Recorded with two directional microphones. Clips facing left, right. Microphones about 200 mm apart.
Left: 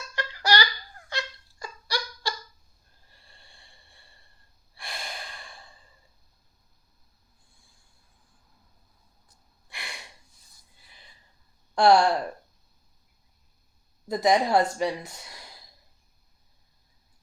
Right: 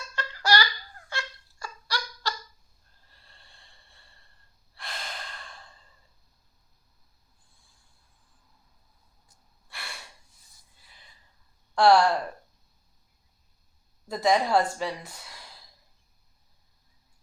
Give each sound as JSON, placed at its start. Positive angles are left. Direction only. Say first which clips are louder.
{"t": 0.2, "sound": "a sound", "louder": "even", "side_deg": 15}
{"t": 3.1, "sound": "snort", "louder": "left 1 dB", "side_deg": 15}
{"t": 4.7, "sound": "breathing", "louder": "left 1 dB", "side_deg": 10}
{"t": 9.6, "sound": "a sound", "louder": "left 1 dB", "side_deg": 15}
{"t": 11.7, "sound": "speech", "louder": "left 1 dB", "side_deg": 20}
{"t": 14.1, "sound": "speech", "louder": "left 1 dB", "side_deg": 20}